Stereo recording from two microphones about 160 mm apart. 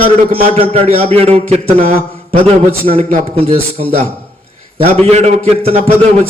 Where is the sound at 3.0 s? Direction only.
35° right (ahead or behind).